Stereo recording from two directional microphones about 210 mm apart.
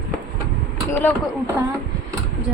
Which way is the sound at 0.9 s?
10° left (ahead or behind).